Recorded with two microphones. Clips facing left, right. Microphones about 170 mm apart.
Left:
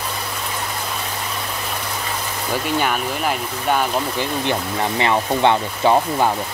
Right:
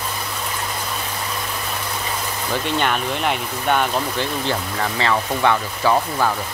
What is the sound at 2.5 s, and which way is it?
Speech, 5° left (ahead or behind).